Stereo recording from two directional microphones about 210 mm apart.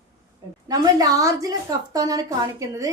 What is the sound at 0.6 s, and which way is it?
A woman's voice, 15° right (ahead or behind).